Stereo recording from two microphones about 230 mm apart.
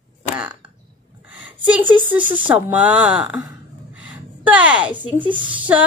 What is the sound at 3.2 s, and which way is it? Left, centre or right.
Speech, centre.